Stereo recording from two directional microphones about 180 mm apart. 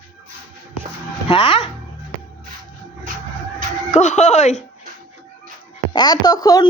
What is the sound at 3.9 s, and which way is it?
Speech, 40° left (ahead or behind).